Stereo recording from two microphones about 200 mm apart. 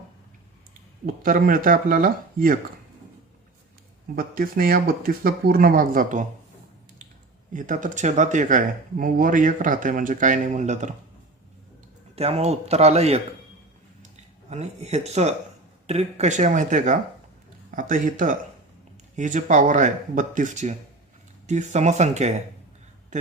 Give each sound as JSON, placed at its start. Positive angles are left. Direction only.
{"t": 1.0, "sound": "speech", "side_deg": -45}
{"t": 4.1, "sound": "speech", "side_deg": -45}
{"t": 7.5, "sound": "speech", "side_deg": -40}
{"t": 12.1, "sound": "speech", "side_deg": -30}
{"t": 14.5, "sound": "speech", "side_deg": -35}